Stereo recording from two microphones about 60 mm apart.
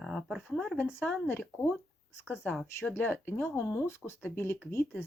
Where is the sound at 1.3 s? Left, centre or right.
Left.